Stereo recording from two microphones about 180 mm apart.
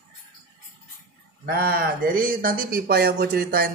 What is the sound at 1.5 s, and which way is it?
Speech, 60° right (ahead or behind).